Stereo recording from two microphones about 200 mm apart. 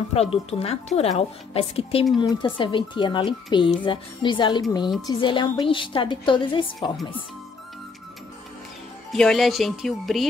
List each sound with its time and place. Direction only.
0.1 s speech: 30° left (ahead or behind)
9.1 s speech: centre (ahead or behind)